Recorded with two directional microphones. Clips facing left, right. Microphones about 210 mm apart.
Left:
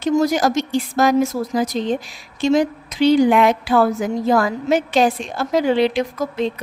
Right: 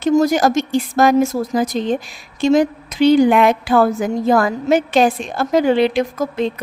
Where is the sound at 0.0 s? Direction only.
50° right (ahead or behind).